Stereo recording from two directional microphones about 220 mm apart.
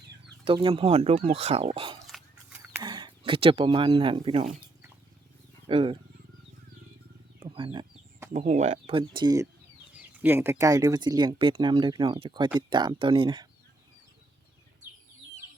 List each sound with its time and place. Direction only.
0.4 s speech: 25° right (ahead or behind)
2.0 s a sound: 5° right (ahead or behind); by 4.5 s 25° right (ahead or behind)
5.6 s speech: 25° right (ahead or behind)
7.3 s a sound: 20° right (ahead or behind)
8.3 s speech: 35° right (ahead or behind); by 9.5 s 20° right (ahead or behind)
10.0 s speech: 5° right (ahead or behind)